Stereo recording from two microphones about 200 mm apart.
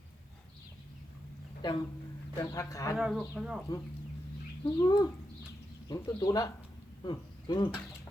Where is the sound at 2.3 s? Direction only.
15° left (ahead or behind).